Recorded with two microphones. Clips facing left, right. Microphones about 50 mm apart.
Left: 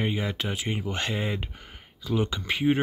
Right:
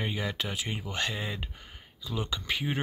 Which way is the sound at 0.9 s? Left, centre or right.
Left.